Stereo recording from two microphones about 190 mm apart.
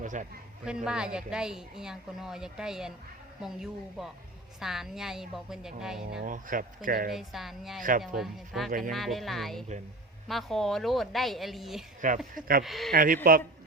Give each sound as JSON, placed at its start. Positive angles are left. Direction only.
{"t": 0.0, "sound": "chatter", "side_deg": -40}
{"t": 0.9, "sound": "a woman's voice", "side_deg": -5}
{"t": 6.2, "sound": "speech", "side_deg": -45}
{"t": 7.1, "sound": "a woman's voice", "side_deg": 0}
{"t": 7.8, "sound": "speech", "side_deg": -45}
{"t": 8.1, "sound": "a woman's voice", "side_deg": 0}
{"t": 12.0, "sound": "speech", "side_deg": -45}
{"t": 12.6, "sound": "a woman's voice", "side_deg": 0}
{"t": 12.9, "sound": "speech", "side_deg": -50}